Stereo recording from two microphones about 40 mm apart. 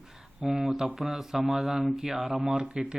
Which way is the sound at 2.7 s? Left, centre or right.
Centre.